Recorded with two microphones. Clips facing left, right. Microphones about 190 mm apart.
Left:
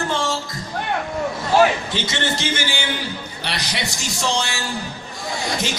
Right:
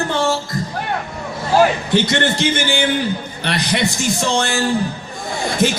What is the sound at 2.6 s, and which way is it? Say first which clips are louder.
A man's voice: right 7 dB; 55° right (ahead or behind).